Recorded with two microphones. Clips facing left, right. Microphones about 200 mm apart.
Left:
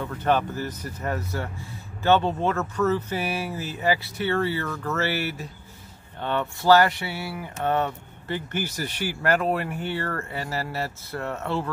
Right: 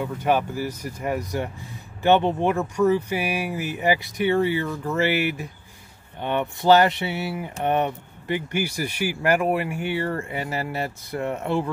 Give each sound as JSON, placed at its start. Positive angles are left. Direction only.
{"t": 0.0, "sound": "speech", "side_deg": -10}